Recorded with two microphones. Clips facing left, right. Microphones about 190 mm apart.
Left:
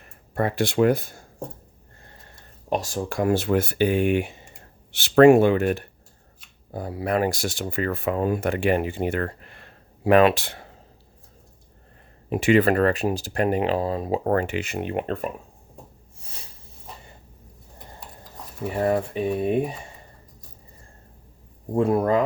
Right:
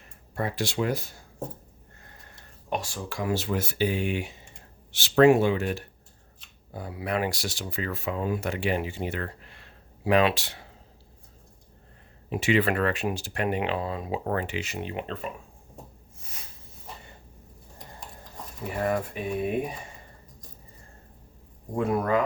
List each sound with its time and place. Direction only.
0.3 s speech: 55° left (ahead or behind)
2.6 s speech: 40° left (ahead or behind); by 5.8 s 55° left (ahead or behind)
6.7 s speech: 40° left (ahead or behind)
12.3 s speech: 50° left (ahead or behind)
18.8 s speech: 30° left (ahead or behind)
21.8 s speech: 30° left (ahead or behind)